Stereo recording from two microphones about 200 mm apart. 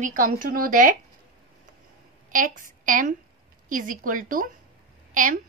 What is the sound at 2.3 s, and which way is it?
A woman's voice, 40° right (ahead or behind).